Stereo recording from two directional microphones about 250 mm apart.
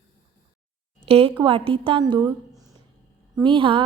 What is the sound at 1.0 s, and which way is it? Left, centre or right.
A woman's voice, right.